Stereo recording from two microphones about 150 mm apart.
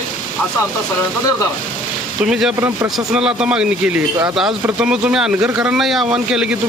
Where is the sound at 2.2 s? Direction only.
5° right (ahead or behind).